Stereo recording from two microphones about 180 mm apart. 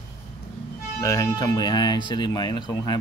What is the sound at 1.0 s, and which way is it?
Speech, 15° left (ahead or behind).